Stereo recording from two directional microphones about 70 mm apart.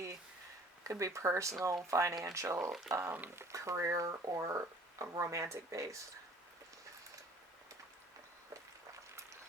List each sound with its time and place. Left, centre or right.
0.9 s speech: right
2.6 s speech: centre
3.1 s speech: right
3.5 s speech: right